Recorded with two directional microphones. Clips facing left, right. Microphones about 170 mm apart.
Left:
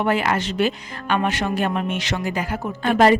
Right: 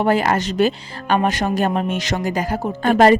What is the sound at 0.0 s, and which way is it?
A woman's voice, 40° right (ahead or behind).